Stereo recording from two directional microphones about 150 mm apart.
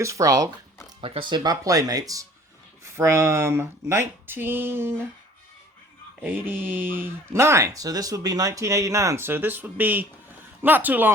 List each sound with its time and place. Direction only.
0.0 s speech: 20° right (ahead or behind)
1.0 s speech: 35° right (ahead or behind); by 5.0 s 15° right (ahead or behind)
6.2 s speech: 15° right (ahead or behind)